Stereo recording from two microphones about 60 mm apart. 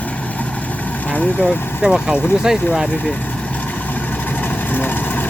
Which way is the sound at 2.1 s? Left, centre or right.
Left.